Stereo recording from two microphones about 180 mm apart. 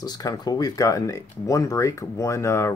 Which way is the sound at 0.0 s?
20° left (ahead or behind).